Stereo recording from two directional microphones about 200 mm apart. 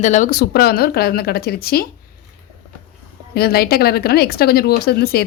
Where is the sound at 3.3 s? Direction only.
50° left (ahead or behind).